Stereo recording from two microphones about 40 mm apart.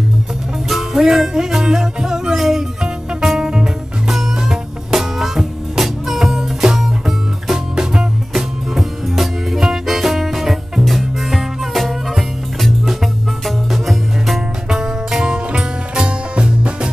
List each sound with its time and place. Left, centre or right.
0.7 s music: centre
7.7 s music: right
8.3 s music: centre
14.8 s music: centre